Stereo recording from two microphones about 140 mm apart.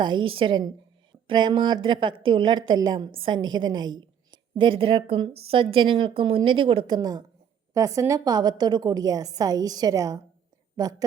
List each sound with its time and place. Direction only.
0.0 s a woman's voice: 35° right (ahead or behind)